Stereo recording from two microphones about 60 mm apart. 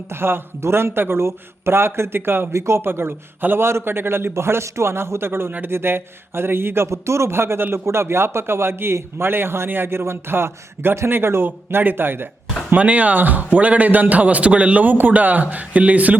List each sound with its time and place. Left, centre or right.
0.1 s speech: right
2.5 s a man's voice: right
5.5 s a man's voice: right
5.7 s speech: right
6.8 s a man's voice: right
12.7 s a man's voice: right